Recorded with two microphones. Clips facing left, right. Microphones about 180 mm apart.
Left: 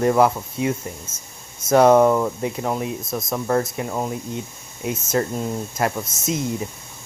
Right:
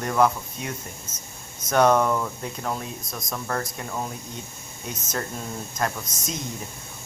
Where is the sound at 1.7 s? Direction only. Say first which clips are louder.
Left 6 dB; 30° left (ahead or behind).